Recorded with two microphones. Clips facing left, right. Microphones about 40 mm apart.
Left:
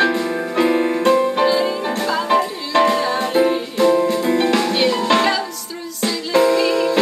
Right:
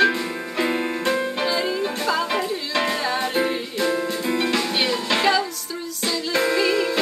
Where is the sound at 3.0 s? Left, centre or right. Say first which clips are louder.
Left 4 dB; centre.